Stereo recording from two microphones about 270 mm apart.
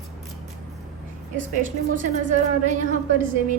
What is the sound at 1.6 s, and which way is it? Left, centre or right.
A woman's voice, right.